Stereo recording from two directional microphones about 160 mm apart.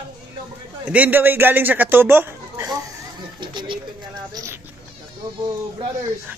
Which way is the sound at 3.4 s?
30° right (ahead or behind).